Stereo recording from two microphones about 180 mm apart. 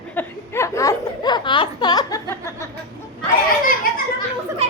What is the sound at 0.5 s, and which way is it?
Speech, 15° left (ahead or behind).